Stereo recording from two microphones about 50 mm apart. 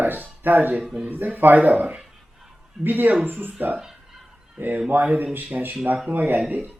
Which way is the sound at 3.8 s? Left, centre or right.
Centre.